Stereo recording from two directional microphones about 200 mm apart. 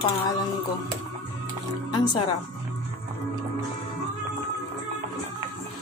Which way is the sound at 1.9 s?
20° left (ahead or behind).